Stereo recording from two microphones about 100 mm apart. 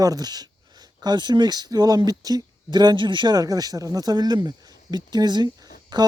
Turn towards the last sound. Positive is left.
turn(degrees=-45)  # may be behind; listen again after turning